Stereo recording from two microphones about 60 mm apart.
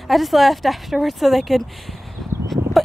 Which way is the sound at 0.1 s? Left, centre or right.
Centre.